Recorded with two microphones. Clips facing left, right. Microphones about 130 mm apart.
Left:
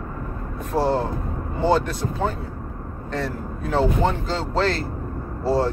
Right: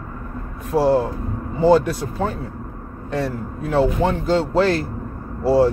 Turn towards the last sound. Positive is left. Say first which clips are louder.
# right 5 dB
turn(degrees=-10)  # may be behind; listen again after turning